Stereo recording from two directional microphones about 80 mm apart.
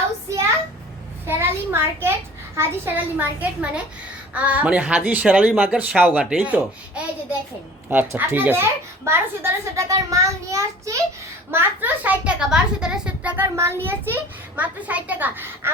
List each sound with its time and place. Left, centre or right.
1.3 s a sound: right
2.6 s a child's voice: right
8.0 s a child's voice: right
9.9 s a child's voice: right
11.5 s a child's voice: right; by 13.3 s centre
13.3 s a child's voice: right